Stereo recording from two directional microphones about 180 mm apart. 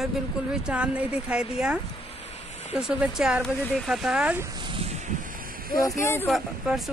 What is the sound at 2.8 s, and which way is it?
Speech, 5° right (ahead or behind).